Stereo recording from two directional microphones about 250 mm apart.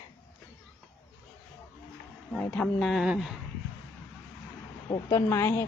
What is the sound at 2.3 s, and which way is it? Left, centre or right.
Speech, centre.